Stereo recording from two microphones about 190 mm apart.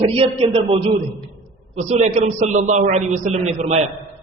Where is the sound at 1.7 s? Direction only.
35° right (ahead or behind).